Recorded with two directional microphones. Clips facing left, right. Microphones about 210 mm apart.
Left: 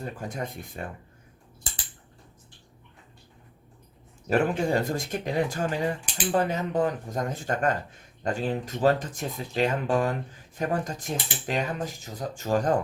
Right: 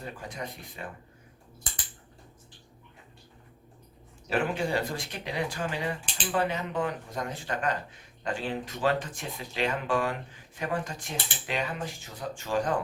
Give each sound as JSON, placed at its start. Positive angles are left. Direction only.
{"t": 0.0, "sound": "speech", "side_deg": 45}
{"t": 4.3, "sound": "speech", "side_deg": 45}